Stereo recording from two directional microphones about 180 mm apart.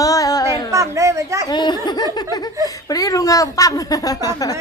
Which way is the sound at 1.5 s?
25° left (ahead or behind).